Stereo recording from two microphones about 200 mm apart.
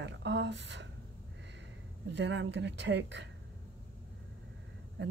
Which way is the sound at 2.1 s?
60° right (ahead or behind).